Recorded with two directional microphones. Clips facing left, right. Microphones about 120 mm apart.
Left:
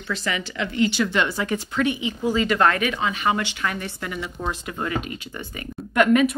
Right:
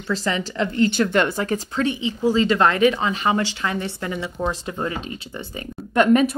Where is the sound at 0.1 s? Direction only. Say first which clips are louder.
Right 4 dB; 35° right (ahead or behind).